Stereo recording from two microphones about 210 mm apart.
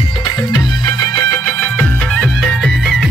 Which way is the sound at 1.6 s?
10° left (ahead or behind).